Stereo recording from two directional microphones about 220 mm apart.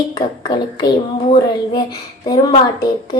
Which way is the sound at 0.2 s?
20° left (ahead or behind).